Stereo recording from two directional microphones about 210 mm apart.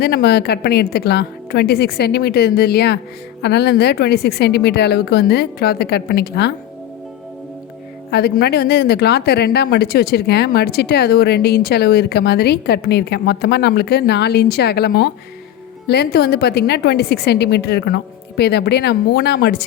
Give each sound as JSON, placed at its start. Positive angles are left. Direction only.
{"t": 0.0, "sound": "speech", "side_deg": 50}
{"t": 8.1, "sound": "speech", "side_deg": 50}